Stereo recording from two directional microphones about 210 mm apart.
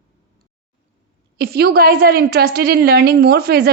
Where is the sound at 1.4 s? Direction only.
50° right (ahead or behind).